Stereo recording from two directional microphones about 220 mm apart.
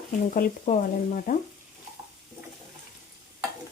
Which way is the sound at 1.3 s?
40° left (ahead or behind).